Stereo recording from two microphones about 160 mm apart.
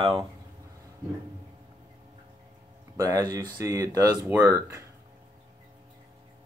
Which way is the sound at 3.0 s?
20° right (ahead or behind).